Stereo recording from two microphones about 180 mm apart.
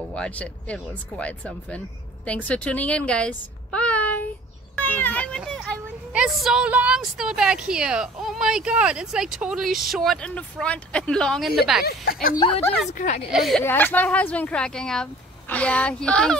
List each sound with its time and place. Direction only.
0.1 s a child's voice: 5° left (ahead or behind)
4.7 s meow: 10° left (ahead or behind)
5.4 s vehicle: centre (ahead or behind)
6.1 s a woman's voice: 5° right (ahead or behind)
11.8 s speech: 55° left (ahead or behind)
12.4 s a woman's voice: 30° left (ahead or behind)
12.9 s speech: 45° left (ahead or behind)
13.3 s a woman's voice: centre (ahead or behind)
13.7 s speech: 10° left (ahead or behind)